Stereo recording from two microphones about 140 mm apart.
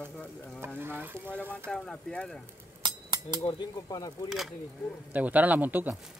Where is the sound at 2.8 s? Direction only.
30° right (ahead or behind).